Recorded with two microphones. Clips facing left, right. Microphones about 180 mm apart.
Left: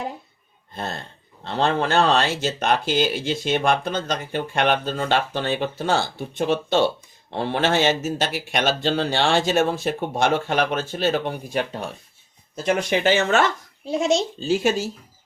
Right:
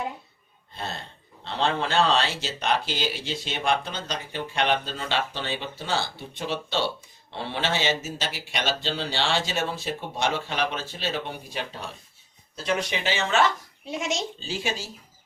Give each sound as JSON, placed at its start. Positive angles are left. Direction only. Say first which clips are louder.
{"t": 0.7, "sound": "burping", "louder": "left 5 dB", "side_deg": 50}
{"t": 1.5, "sound": "speech", "louder": "left 5 dB", "side_deg": 50}
{"t": 13.8, "sound": "a child's voice", "louder": "left 9 dB", "side_deg": 35}
{"t": 14.3, "sound": "speech", "louder": "left 10 dB", "side_deg": 45}